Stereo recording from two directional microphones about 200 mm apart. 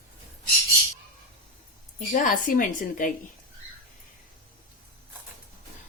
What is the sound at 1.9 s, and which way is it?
A woman's voice, 40° left (ahead or behind).